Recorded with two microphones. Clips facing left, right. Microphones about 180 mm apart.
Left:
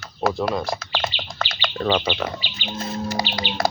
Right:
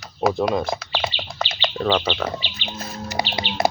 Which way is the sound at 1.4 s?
25° right (ahead or behind).